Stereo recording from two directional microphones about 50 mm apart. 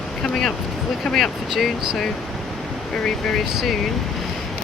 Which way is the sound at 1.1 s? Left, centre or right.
Centre.